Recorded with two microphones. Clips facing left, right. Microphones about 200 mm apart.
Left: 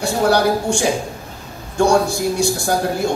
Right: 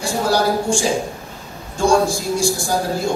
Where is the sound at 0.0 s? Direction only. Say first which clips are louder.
Left 3 dB; 65° left (ahead or behind).